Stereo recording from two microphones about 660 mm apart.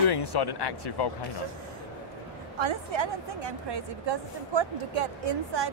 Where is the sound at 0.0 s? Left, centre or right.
Left.